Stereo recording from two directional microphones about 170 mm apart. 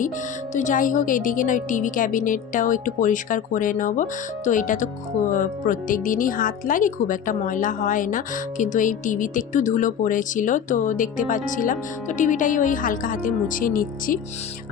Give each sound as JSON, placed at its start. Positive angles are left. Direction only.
{"t": 0.5, "sound": "speech", "side_deg": 50}